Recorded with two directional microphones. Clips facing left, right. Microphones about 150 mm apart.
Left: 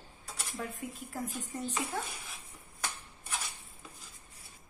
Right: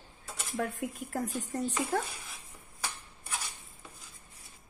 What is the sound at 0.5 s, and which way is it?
A woman's voice, 85° right.